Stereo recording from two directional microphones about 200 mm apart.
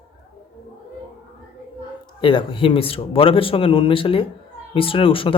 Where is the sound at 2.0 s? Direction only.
25° left (ahead or behind).